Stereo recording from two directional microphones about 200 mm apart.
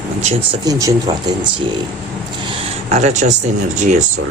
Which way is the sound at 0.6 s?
15° right (ahead or behind).